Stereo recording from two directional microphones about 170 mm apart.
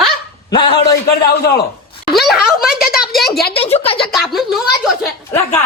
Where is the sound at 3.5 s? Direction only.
35° left (ahead or behind).